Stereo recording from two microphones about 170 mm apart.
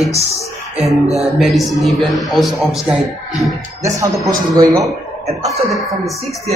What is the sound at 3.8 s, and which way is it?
Speech, 15° right (ahead or behind).